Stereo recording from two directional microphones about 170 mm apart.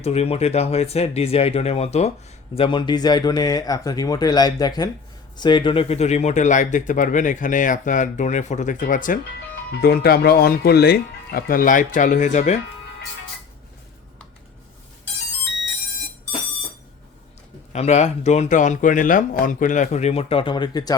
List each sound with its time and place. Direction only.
0.0 s speech: 35° left (ahead or behind)
2.6 s speech: 30° left (ahead or behind); by 9.1 s 50° left (ahead or behind)
9.8 s speech: 65° left (ahead or behind); by 12.5 s 45° left (ahead or behind)
17.7 s speech: 40° left (ahead or behind); by 20.9 s 25° left (ahead or behind)